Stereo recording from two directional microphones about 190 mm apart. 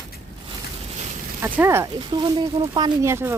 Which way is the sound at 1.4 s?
10° right (ahead or behind).